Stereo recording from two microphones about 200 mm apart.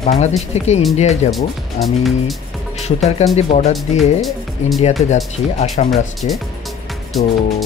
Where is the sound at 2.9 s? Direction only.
35° left (ahead or behind).